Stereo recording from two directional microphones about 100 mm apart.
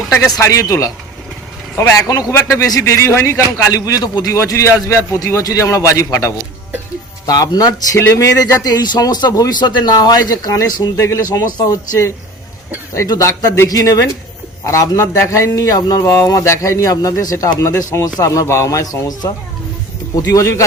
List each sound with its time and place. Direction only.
0.3 s a man's voice: 35° left (ahead or behind)
4.4 s a man's voice: 30° left (ahead or behind)
7.9 s a man's voice: 30° left (ahead or behind)